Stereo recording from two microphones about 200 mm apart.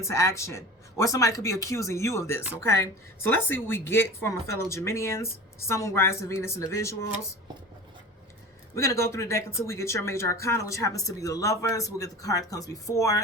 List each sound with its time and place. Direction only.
0.0 s speech: 15° left (ahead or behind)
8.7 s speech: 15° left (ahead or behind)